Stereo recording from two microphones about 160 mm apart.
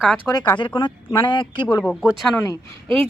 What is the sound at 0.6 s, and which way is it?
Speech, 30° left (ahead or behind).